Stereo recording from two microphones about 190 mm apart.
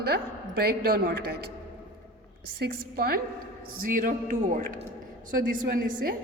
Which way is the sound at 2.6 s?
55° right (ahead or behind).